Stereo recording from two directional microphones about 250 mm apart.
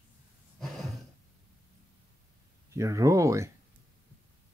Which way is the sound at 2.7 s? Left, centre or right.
Centre.